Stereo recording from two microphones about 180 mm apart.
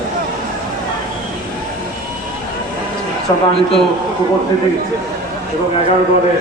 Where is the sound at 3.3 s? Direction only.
25° left (ahead or behind).